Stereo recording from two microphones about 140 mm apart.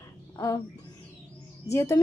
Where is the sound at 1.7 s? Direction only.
20° left (ahead or behind).